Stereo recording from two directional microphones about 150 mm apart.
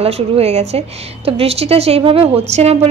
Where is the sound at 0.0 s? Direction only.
40° right (ahead or behind).